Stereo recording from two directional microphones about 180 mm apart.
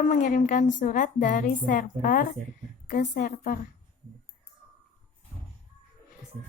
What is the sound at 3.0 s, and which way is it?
Speech, 60° left (ahead or behind).